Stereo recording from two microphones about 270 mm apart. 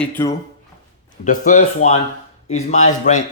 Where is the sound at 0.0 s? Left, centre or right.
Centre.